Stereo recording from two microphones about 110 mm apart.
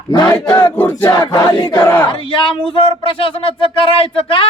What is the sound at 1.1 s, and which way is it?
Battle cry, 35° left (ahead or behind).